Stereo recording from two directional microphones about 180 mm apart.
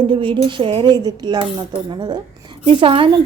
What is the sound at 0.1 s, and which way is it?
A woman's voice, 30° right (ahead or behind).